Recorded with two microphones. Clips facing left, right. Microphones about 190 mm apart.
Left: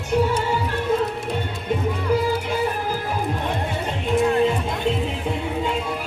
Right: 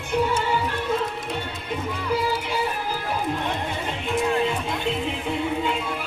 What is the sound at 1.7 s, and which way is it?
Music, 45° left (ahead or behind).